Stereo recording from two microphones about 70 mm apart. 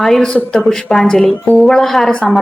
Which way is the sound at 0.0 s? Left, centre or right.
Centre.